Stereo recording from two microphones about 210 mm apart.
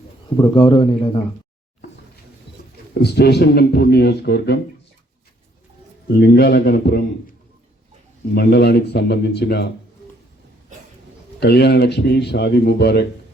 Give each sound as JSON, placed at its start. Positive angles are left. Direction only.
{"t": 0.3, "sound": "a man's voice", "side_deg": 25}
{"t": 2.9, "sound": "a man's voice", "side_deg": 50}
{"t": 6.1, "sound": "a man's voice", "side_deg": 50}
{"t": 8.4, "sound": "a man's voice", "side_deg": 50}
{"t": 11.3, "sound": "a man's voice", "side_deg": 50}